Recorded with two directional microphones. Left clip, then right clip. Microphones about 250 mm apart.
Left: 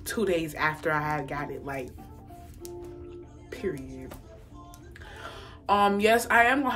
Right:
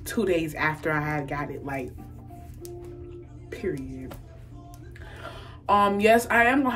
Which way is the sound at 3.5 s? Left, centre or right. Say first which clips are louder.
Right 2 dB; centre.